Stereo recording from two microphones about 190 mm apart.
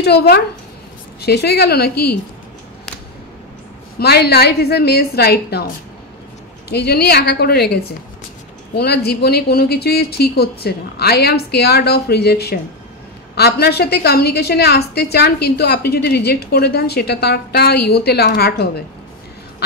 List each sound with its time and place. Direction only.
0.0 s a woman's voice: 60° left (ahead or behind)
4.0 s a woman's voice: 55° left (ahead or behind)
6.7 s a woman's voice: 55° left (ahead or behind)